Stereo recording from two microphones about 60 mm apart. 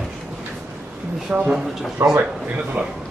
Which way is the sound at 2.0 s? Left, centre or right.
Right.